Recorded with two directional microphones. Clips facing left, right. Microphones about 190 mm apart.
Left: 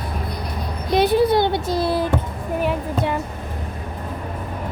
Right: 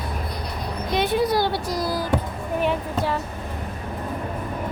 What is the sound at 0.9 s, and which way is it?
A child's voice, 35° left (ahead or behind).